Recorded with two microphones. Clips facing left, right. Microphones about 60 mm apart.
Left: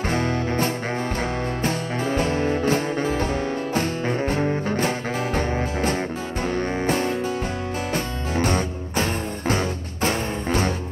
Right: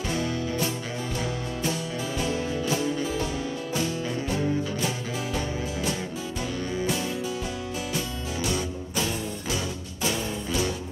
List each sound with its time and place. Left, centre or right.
1.6 s music: left